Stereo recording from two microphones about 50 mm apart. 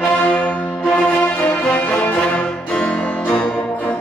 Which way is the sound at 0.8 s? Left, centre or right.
Centre.